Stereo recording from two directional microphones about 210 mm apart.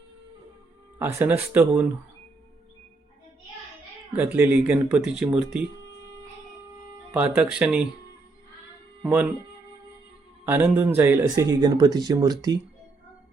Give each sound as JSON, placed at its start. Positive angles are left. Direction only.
{"t": 0.9, "sound": "speech", "side_deg": -10}
{"t": 4.2, "sound": "speech", "side_deg": -10}
{"t": 7.1, "sound": "speech", "side_deg": -5}
{"t": 9.0, "sound": "speech", "side_deg": -5}
{"t": 10.4, "sound": "speech", "side_deg": -10}